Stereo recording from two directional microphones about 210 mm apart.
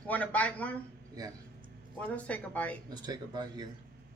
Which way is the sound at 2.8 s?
20° right (ahead or behind).